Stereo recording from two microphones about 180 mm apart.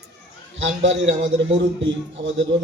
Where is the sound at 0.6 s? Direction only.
90° right.